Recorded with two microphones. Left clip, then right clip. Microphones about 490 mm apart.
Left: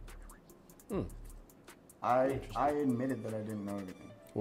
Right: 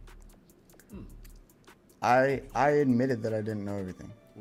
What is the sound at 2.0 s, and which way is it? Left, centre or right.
Speech, right.